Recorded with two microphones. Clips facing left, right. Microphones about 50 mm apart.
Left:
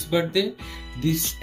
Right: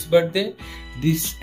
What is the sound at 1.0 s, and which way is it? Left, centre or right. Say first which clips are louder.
Speech: right 3 dB; right.